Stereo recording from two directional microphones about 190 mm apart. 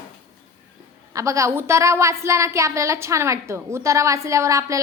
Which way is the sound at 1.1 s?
15° right (ahead or behind).